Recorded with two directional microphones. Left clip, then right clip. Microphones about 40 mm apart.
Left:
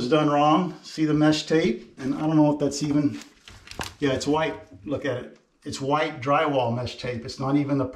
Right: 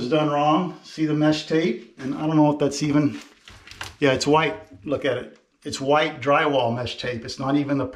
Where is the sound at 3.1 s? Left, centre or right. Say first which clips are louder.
Right 1 dB; centre.